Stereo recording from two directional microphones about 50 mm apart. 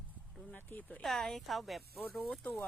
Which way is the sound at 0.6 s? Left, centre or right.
Left.